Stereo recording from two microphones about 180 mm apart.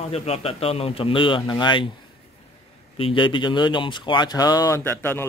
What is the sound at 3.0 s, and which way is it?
Speech, 30° left (ahead or behind).